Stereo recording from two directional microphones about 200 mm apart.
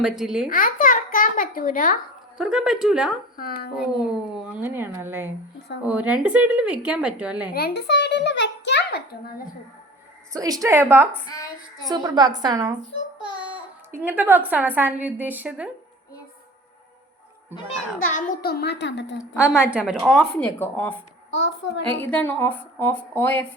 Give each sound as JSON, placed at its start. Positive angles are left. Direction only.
{"t": 0.0, "sound": "a woman's voice", "side_deg": 0}
{"t": 0.5, "sound": "babbling", "side_deg": 45}
{"t": 2.4, "sound": "a woman's voice", "side_deg": -5}
{"t": 3.3, "sound": "speech", "side_deg": 50}
{"t": 4.4, "sound": "a woman's voice", "side_deg": -10}
{"t": 7.5, "sound": "a child's voice", "side_deg": 50}
{"t": 10.3, "sound": "a woman's voice", "side_deg": -15}
{"t": 13.9, "sound": "a woman's voice", "side_deg": -10}
{"t": 18.1, "sound": "a child's voice", "side_deg": 45}
{"t": 19.4, "sound": "a woman's voice", "side_deg": -5}
{"t": 21.2, "sound": "a child's voice", "side_deg": 65}
{"t": 22.1, "sound": "speech", "side_deg": 10}